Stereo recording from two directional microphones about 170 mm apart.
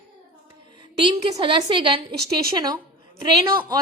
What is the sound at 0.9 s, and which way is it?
A woman's voice, 30° right (ahead or behind).